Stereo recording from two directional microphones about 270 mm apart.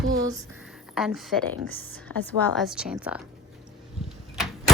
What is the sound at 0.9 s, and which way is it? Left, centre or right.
A woman's voice, centre.